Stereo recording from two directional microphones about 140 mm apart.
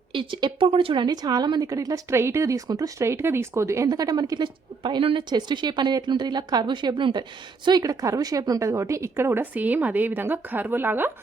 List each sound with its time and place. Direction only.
0.1 s a woman's voice: 35° right (ahead or behind); by 11.1 s 15° right (ahead or behind)